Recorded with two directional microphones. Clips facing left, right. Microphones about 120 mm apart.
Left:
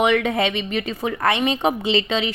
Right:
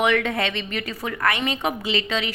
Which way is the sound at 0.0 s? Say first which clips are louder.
Left 3 dB; 15° left (ahead or behind).